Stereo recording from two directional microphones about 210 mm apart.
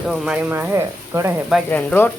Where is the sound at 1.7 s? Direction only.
10° left (ahead or behind).